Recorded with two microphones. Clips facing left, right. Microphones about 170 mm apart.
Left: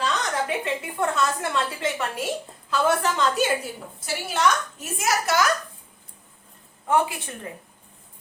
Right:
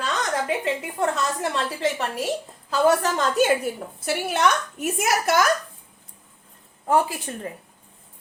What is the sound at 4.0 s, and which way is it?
A woman's voice, 60° right (ahead or behind).